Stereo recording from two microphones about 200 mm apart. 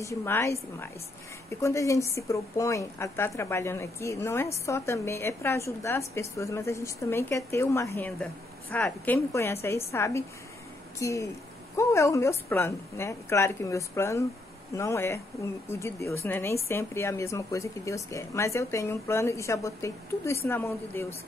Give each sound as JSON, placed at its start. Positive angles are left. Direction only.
{"t": 0.0, "sound": "speech", "side_deg": 15}